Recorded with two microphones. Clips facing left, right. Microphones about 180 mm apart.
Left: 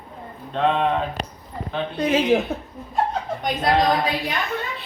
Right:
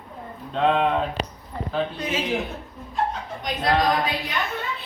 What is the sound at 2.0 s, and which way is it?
Speech, 35° left (ahead or behind).